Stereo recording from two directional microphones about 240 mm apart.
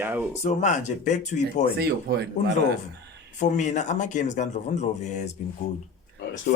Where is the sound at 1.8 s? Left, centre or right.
Right.